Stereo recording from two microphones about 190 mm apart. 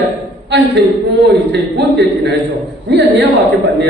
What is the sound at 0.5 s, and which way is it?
A man's voice, 65° right (ahead or behind).